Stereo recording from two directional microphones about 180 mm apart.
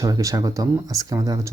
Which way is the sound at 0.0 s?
20° right (ahead or behind).